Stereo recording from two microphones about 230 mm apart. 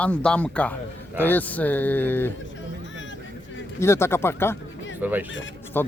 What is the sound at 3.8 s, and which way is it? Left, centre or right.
Speech, centre.